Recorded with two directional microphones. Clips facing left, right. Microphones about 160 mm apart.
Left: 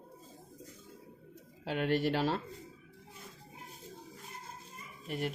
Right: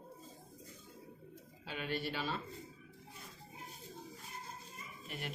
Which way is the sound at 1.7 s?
70° left (ahead or behind).